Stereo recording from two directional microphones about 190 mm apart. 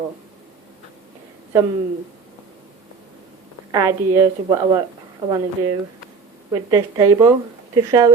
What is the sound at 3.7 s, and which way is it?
A woman's voice, 15° right (ahead or behind).